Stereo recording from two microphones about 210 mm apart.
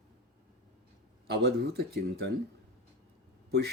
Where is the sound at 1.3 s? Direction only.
50° right (ahead or behind).